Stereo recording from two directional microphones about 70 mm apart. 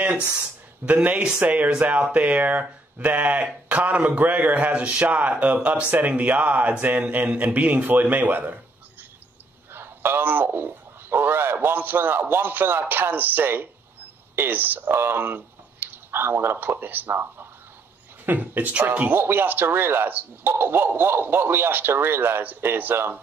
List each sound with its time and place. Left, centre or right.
0.8 s a man's voice: right
9.7 s a man's voice: right